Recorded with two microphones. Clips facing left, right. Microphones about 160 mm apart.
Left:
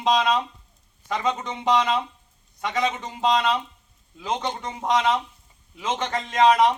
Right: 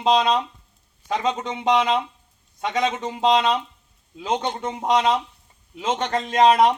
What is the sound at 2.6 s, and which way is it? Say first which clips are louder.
Speech: right 2 dB; 25° right (ahead or behind).